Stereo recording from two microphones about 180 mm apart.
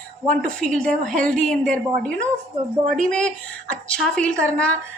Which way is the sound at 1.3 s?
5° left (ahead or behind).